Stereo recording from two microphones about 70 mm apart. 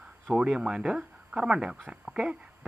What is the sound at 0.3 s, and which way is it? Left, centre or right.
Speech, centre.